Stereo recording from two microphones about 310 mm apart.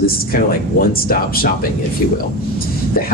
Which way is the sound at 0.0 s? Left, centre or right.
Left.